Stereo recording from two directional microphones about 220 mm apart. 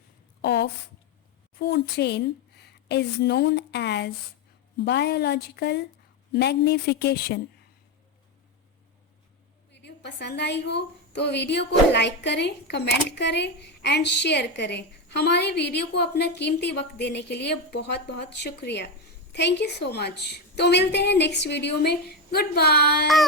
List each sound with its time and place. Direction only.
0.4 s a woman's voice: 50° left (ahead or behind)
9.8 s a woman's voice: 50° left (ahead or behind)